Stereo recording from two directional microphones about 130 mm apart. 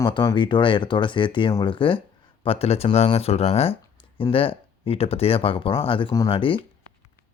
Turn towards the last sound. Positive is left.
turn(degrees=45)  # may be behind; listen again after turning